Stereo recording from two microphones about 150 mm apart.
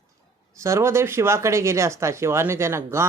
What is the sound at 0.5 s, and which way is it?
Speech, 20° right (ahead or behind).